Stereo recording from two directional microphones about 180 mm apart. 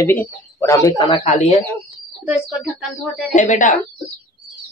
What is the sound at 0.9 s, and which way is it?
Speech, 25° left (ahead or behind).